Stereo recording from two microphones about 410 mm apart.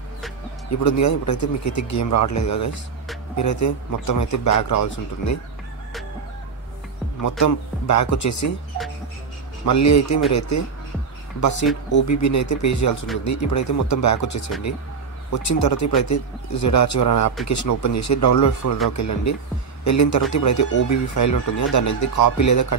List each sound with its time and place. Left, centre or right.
0.7 s speech: left
7.2 s speech: left
9.7 s a man's voice: left
11.4 s speech: left